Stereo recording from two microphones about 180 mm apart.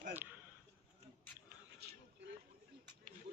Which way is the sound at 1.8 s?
60° right (ahead or behind).